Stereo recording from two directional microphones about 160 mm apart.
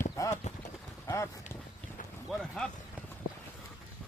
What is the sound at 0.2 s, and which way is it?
Clip-clop, 20° left (ahead or behind).